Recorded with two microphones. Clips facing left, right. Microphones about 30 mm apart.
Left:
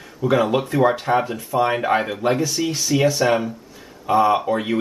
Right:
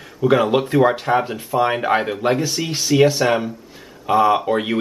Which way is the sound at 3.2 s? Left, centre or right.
Centre.